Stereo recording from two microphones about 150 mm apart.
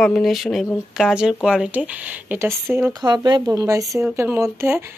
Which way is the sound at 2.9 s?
25° right (ahead or behind).